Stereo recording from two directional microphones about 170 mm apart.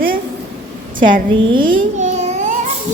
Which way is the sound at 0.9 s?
50° right (ahead or behind).